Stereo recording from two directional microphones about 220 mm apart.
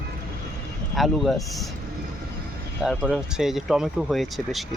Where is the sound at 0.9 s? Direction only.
Centre (ahead or behind).